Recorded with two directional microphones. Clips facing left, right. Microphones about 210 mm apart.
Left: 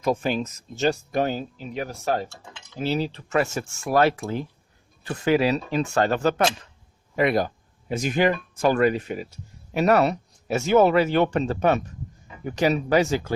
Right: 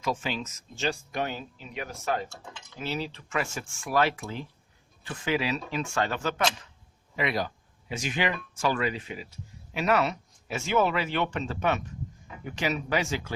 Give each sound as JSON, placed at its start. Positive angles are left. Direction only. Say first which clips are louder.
{"t": 0.0, "sound": "speech", "louder": "left 7 dB", "side_deg": 50}
{"t": 7.2, "sound": "speech", "louder": "left 8 dB", "side_deg": 50}